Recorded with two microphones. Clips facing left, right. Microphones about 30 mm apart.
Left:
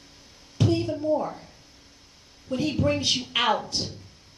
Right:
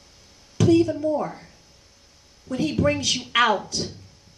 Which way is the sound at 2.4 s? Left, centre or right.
Right.